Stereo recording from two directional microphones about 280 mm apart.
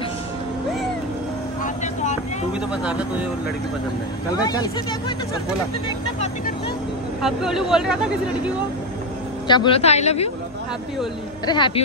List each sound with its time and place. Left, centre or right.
2.7 s speech: centre
4.4 s speech: centre
7.2 s speech: centre
9.5 s speech: centre
11.4 s speech: centre